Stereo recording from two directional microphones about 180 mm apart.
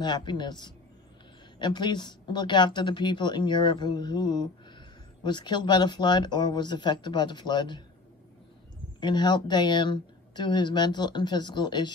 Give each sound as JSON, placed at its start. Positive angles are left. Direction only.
{"t": 0.0, "sound": "speech", "side_deg": 25}
{"t": 9.0, "sound": "speech", "side_deg": 25}